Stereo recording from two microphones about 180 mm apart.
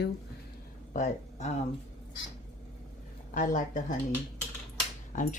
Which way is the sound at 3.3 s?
45° left (ahead or behind).